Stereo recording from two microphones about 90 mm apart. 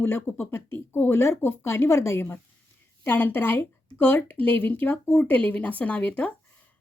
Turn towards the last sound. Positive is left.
turn(degrees=15)  # may be behind; listen again after turning